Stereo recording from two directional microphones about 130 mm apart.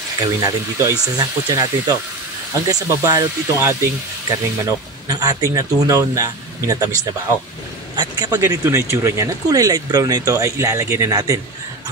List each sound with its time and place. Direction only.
0.4 s speech: 25° right (ahead or behind)
7.9 s a sound: 35° right (ahead or behind)
8.5 s speech: 20° right (ahead or behind)